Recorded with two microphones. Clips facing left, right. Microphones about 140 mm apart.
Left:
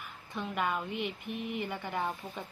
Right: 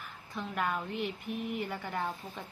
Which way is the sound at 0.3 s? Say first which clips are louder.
Left 1 dB; 5° left (ahead or behind).